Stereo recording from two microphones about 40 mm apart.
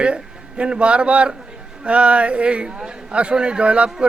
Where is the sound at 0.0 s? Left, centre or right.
Right.